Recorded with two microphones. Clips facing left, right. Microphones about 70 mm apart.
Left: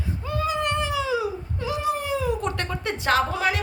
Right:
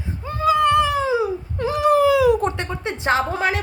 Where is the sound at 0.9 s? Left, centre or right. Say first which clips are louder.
Right 5 dB; right.